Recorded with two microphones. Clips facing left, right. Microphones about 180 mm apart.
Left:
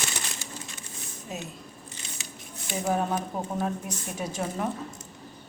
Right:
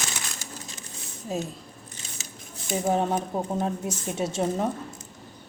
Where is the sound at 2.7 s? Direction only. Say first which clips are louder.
Right 3 dB; 25° right (ahead or behind).